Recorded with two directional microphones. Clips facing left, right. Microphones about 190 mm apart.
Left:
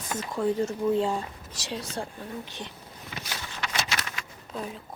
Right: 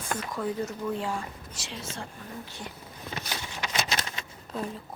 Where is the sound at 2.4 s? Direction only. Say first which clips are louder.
Left 2 dB; 20° left (ahead or behind).